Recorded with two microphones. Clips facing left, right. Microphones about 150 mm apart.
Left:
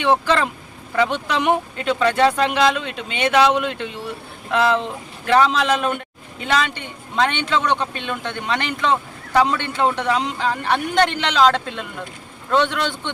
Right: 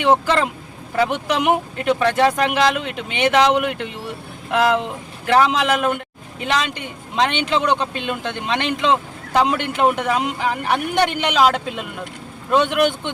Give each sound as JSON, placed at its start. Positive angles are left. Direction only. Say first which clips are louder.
{"t": 0.0, "sound": "speech", "louder": "right 1 dB", "side_deg": -15}